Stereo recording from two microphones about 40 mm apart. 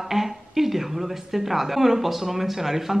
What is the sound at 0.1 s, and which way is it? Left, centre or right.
Speech, centre.